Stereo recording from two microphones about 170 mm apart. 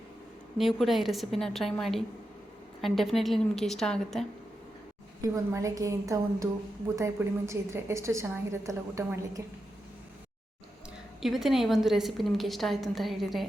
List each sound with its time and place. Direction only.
0.6 s a woman's voice: centre (ahead or behind)
5.2 s a woman's voice: 20° right (ahead or behind)
11.2 s a woman's voice: centre (ahead or behind)